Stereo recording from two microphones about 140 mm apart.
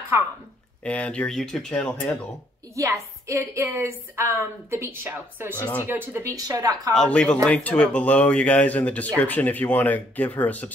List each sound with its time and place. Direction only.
0.1 s a woman's voice: 20° right (ahead or behind)
0.8 s speech: 10° left (ahead or behind)
2.7 s a woman's voice: 20° right (ahead or behind)
5.6 s speech: 15° left (ahead or behind)
5.9 s a woman's voice: 15° right (ahead or behind)
6.9 s speech: 5° left (ahead or behind)